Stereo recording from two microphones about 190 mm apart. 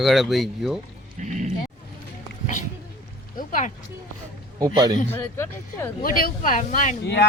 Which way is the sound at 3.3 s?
45° left (ahead or behind).